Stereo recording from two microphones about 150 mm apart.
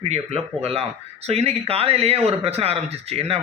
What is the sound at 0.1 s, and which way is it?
A man's voice, 45° right (ahead or behind).